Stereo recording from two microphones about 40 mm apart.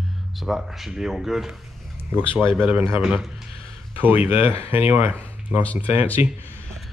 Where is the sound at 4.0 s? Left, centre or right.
Right.